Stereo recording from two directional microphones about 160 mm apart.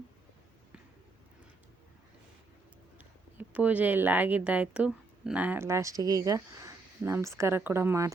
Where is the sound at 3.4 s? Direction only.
10° right (ahead or behind).